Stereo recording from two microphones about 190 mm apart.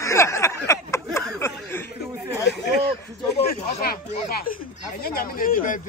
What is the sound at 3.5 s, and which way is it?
Speech, 55° left (ahead or behind).